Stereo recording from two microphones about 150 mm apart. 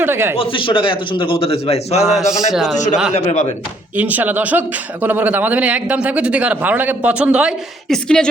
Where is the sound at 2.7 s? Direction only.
50° left (ahead or behind).